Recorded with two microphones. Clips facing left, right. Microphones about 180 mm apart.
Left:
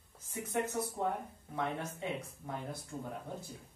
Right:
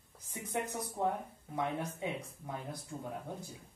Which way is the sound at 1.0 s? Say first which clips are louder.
Right 1 dB; 15° right (ahead or behind).